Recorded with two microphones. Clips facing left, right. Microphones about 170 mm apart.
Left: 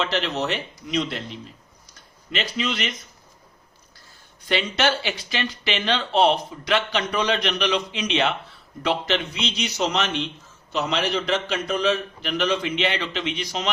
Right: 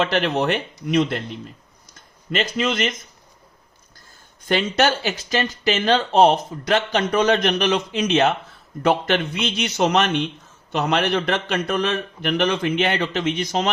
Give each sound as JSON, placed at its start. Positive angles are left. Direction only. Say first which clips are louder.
{"t": 0.0, "sound": "a man's voice", "louder": "right 5 dB", "side_deg": -55}
{"t": 2.3, "sound": "speech", "louder": "right 5 dB", "side_deg": -45}
{"t": 4.8, "sound": "a man's voice", "louder": "right 3 dB", "side_deg": -45}